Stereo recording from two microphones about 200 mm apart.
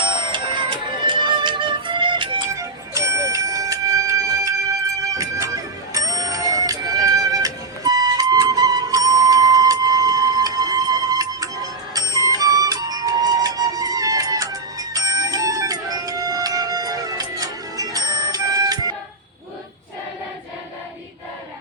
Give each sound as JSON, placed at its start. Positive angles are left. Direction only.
{"t": 0.3, "sound": "music", "side_deg": -25}